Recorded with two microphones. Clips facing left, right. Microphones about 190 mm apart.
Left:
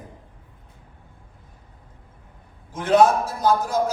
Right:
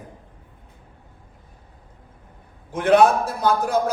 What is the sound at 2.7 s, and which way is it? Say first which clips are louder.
A man's voice: right 1 dB; 60° right (ahead or behind).